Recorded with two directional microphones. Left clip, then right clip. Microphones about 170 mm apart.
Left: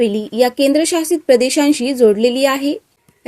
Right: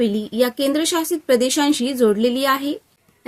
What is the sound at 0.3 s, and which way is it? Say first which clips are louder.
A woman's voice: left 6 dB; 15° left (ahead or behind).